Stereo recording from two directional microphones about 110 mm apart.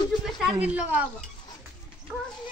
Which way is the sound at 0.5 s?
15° right (ahead or behind).